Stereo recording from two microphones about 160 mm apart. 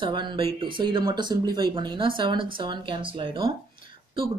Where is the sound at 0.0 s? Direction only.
30° right (ahead or behind).